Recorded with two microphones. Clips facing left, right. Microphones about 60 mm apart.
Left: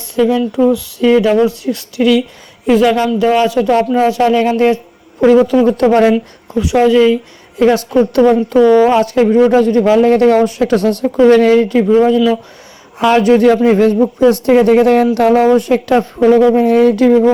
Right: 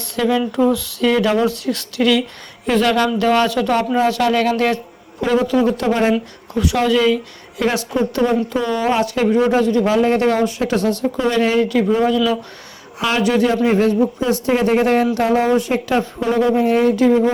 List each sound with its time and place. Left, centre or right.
0.2 s speech: centre
5.2 s speech: left
6.5 s speech: centre
7.6 s speech: left
7.9 s a man's voice: left
8.6 s speech: left
8.9 s a man's voice: left
13.0 s speech: left
13.7 s a man's voice: left